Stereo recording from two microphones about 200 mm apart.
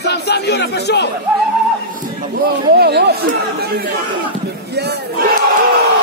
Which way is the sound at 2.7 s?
55° right (ahead or behind).